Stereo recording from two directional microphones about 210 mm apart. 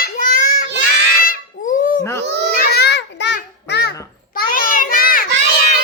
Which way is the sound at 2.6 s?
45° left (ahead or behind).